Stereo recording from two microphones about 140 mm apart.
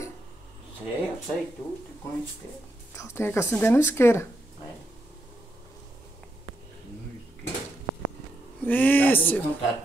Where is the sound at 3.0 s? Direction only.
15° left (ahead or behind).